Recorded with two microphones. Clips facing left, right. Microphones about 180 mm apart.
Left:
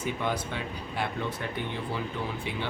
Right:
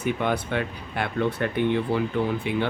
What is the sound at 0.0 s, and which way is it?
Speech, 60° right (ahead or behind).